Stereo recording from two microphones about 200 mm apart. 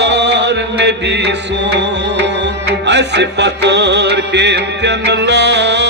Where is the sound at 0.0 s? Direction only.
60° right (ahead or behind).